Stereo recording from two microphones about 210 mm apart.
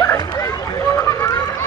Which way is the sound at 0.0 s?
20° left (ahead or behind).